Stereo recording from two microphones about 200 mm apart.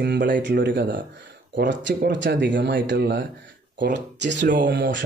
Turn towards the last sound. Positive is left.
turn(degrees=-45)  # may be behind; listen again after turning